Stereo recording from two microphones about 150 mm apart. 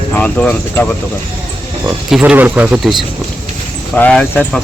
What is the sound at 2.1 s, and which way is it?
Speech, 10° right (ahead or behind).